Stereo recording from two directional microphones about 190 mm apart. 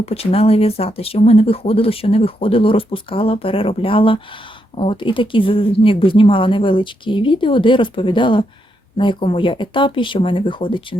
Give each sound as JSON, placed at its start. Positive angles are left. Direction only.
{"t": 0.0, "sound": "speech", "side_deg": 30}